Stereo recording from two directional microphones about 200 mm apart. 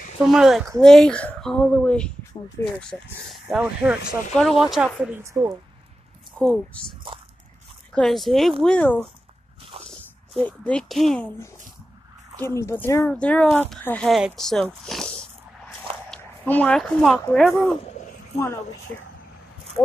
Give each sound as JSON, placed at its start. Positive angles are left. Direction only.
{"t": 0.2, "sound": "speech", "side_deg": 0}
{"t": 5.2, "sound": "speech", "side_deg": -15}
{"t": 6.3, "sound": "speech", "side_deg": 5}
{"t": 7.9, "sound": "speech", "side_deg": 0}